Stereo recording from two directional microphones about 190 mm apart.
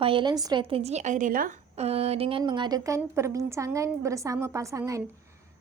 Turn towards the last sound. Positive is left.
turn(degrees=-15)  # may be behind; listen again after turning